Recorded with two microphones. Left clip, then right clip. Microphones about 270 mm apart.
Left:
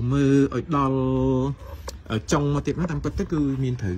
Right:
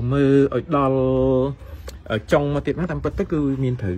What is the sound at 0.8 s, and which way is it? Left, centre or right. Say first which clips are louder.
Speech: right 5 dB; centre.